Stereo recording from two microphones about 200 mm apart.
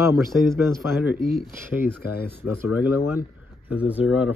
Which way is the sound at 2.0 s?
50° left (ahead or behind).